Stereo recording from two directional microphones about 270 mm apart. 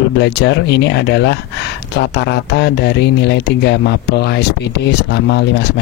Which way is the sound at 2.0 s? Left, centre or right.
Left.